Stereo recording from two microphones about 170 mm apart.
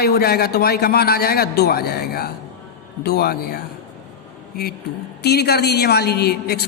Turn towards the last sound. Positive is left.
turn(degrees=70)  # may be behind; listen again after turning